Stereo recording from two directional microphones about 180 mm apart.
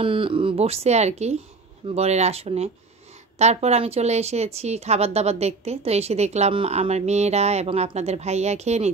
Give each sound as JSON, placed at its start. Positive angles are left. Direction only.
{"t": 0.0, "sound": "speech", "side_deg": -30}